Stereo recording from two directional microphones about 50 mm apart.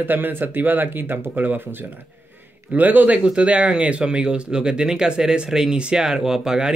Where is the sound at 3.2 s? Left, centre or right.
Right.